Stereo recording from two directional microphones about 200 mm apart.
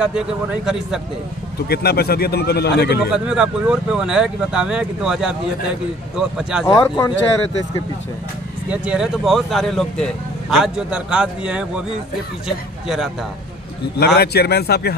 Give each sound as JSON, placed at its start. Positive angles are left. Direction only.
{"t": 0.7, "sound": "speech", "side_deg": -5}
{"t": 1.7, "sound": "speech", "side_deg": 50}
{"t": 3.1, "sound": "speech", "side_deg": -5}
{"t": 6.6, "sound": "speech", "side_deg": 15}
{"t": 8.6, "sound": "speech", "side_deg": -5}
{"t": 13.9, "sound": "speech", "side_deg": 50}